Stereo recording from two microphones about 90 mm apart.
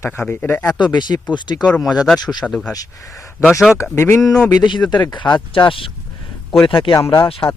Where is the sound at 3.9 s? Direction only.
30° left (ahead or behind).